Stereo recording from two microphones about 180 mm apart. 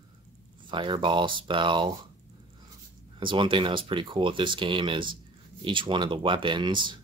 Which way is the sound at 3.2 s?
25° right (ahead or behind).